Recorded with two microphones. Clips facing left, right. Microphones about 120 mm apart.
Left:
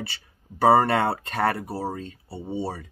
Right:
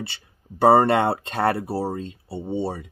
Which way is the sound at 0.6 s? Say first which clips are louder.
Right 2 dB; 25° right (ahead or behind).